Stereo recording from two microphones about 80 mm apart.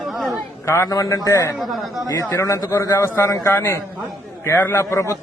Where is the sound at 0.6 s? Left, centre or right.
Left.